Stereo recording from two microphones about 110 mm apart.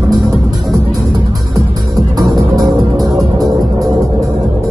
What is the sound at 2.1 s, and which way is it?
Music, 30° right (ahead or behind).